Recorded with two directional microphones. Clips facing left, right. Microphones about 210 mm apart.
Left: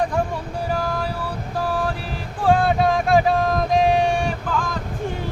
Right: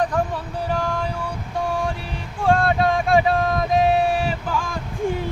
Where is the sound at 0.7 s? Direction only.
5° left (ahead or behind).